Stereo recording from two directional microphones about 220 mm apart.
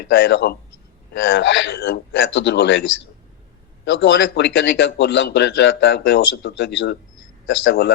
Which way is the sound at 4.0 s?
55° left (ahead or behind).